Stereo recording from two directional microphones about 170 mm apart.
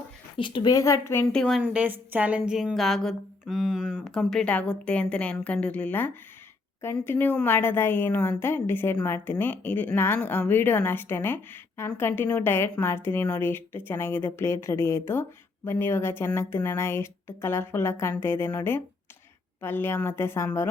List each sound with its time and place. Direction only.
0.3 s speech: 30° left (ahead or behind); by 1.6 s 5° left (ahead or behind)
1.6 s a woman's voice: 10° right (ahead or behind); by 20.7 s 15° left (ahead or behind)